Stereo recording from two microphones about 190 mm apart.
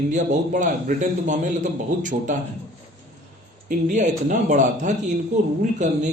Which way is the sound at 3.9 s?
40° right (ahead or behind).